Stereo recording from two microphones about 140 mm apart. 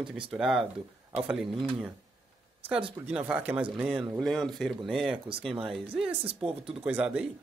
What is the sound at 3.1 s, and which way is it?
Speech, 10° right (ahead or behind).